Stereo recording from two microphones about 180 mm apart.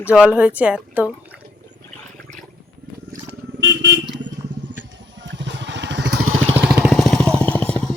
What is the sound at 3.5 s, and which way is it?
Vehicle, 80° right.